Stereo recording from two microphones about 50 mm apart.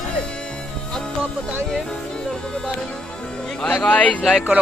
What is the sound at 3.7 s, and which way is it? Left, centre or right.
Speech, left.